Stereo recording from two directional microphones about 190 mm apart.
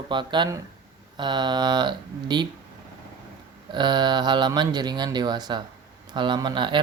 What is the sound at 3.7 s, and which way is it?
Speech, 25° right (ahead or behind).